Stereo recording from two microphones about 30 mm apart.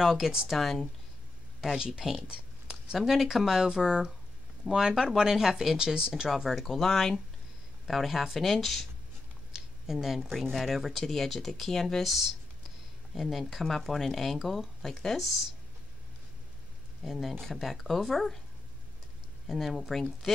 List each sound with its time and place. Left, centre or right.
0.0 s speech: centre
0.5 s speech: centre
1.9 s speech: centre
6.2 s speech: centre
6.7 s speech: centre
7.8 s speech: centre
9.5 s a sound: centre
10.3 s speech: centre
10.6 s speech: centre
12.0 s speech: centre
14.8 s speech: centre
15.1 s speech: centre
17.0 s speech: centre
19.4 s speech: centre